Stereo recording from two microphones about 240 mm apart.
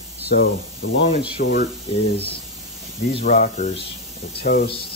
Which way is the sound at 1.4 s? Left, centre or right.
Left.